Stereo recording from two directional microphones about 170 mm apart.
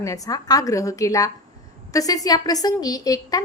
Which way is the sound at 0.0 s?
20° left (ahead or behind).